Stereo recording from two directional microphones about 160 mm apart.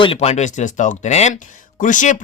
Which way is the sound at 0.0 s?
35° left (ahead or behind).